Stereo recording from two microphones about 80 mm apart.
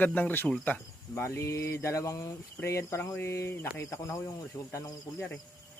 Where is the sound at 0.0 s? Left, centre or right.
Left.